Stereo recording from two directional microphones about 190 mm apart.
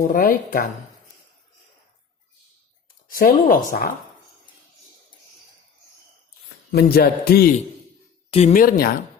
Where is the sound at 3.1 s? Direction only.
50° left (ahead or behind).